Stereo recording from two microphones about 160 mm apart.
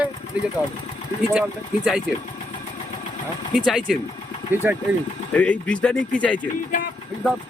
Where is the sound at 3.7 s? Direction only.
5° right (ahead or behind).